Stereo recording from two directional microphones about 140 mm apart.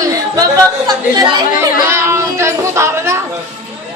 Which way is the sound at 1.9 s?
20° right (ahead or behind).